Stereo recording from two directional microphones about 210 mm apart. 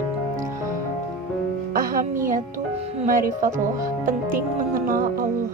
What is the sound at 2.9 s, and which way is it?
Speech, 35° right (ahead or behind).